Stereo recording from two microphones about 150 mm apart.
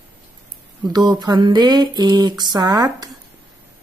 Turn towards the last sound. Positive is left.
turn(degrees=-25)  # may be behind; listen again after turning